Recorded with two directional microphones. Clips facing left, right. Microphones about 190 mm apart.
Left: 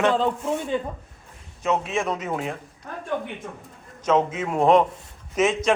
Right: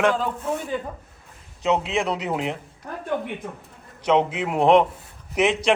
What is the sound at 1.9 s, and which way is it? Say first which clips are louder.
Speech: right 1 dB; 15° right (ahead or behind).